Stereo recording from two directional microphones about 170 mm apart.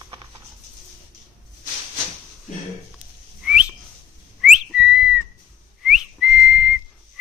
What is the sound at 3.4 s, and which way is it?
Whistling, 5° right (ahead or behind).